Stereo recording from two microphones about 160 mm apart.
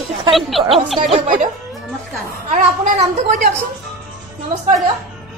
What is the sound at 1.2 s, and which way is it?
A woman's voice, 50° right (ahead or behind).